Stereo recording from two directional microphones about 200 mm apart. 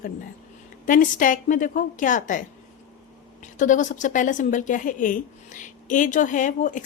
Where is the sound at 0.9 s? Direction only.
40° left (ahead or behind).